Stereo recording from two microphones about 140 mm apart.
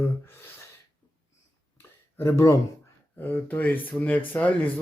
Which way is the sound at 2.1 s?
20° left (ahead or behind).